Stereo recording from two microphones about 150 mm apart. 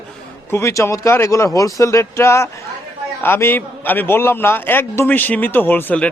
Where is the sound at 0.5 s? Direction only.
20° left (ahead or behind).